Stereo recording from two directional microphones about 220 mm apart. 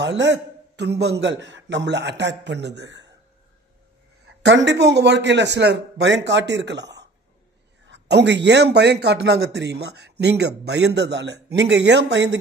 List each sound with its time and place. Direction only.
0.0 s speech: 55° right (ahead or behind)
4.6 s speech: 50° right (ahead or behind)